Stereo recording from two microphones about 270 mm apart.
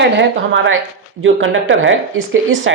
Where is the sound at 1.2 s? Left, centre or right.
Right.